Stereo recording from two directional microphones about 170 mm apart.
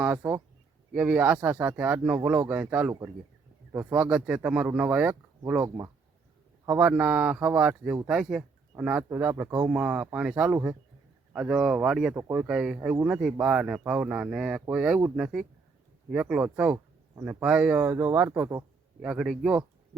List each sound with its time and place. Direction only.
0.0 s speech: 10° right (ahead or behind)
5.6 s speech: 20° right (ahead or behind)
6.7 s speech: 10° right (ahead or behind)
19.0 s speech: 5° right (ahead or behind)